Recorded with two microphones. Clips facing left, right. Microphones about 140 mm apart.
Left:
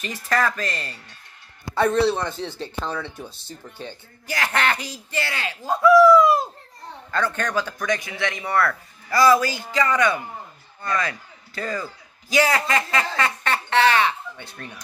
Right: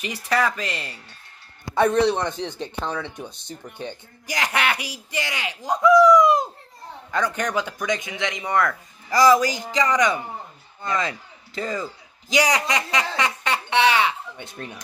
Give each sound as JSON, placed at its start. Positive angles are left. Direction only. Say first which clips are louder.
{"t": 0.0, "sound": "a man's voice", "louder": "even", "side_deg": -10}